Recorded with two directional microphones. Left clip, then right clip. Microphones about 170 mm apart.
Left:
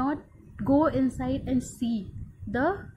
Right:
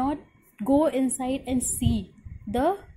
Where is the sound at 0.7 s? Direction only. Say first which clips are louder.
Right 1 dB; 10° right (ahead or behind).